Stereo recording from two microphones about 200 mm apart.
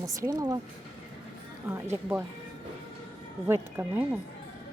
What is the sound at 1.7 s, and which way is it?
Speech, 10° right (ahead or behind).